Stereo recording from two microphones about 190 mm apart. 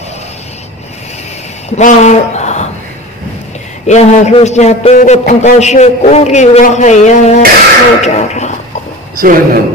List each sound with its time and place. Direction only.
1.8 s a sound: 40° left (ahead or behind)
3.8 s a man's voice: 35° left (ahead or behind)
9.1 s a man's voice: 50° right (ahead or behind)